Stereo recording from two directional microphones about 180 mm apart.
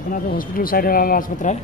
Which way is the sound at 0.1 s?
50° left (ahead or behind).